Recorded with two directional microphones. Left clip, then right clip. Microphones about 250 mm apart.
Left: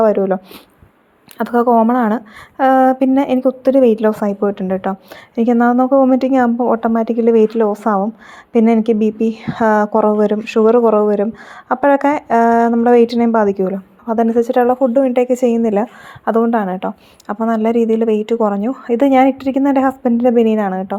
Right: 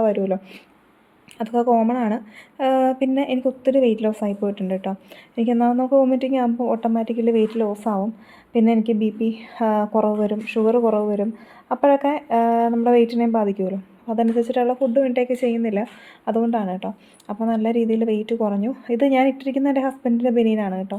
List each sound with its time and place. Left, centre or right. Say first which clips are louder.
0.0 s speech: left 7 dB; centre
1.4 s a woman's voice: left 6 dB; centre